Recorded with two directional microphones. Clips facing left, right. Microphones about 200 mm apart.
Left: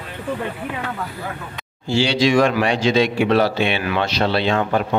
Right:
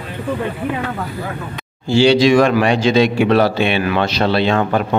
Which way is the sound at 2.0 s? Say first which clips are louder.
Right 5 dB; 50° right (ahead or behind).